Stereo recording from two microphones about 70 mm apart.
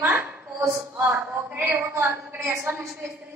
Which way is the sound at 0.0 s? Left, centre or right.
Right.